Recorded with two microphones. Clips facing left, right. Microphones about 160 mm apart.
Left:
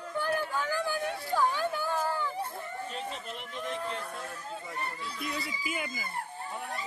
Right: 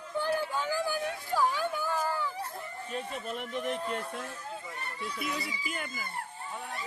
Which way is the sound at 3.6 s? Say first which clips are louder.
Right 1 dB; 15° right (ahead or behind).